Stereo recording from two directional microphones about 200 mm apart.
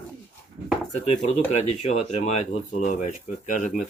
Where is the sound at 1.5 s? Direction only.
35° left (ahead or behind).